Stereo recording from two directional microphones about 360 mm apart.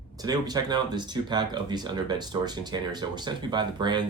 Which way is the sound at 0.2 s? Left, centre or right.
Centre.